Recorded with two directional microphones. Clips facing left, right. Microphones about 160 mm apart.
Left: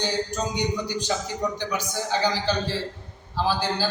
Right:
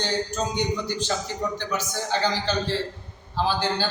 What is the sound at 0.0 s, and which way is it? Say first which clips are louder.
A man's voice: even; 10° left (ahead or behind).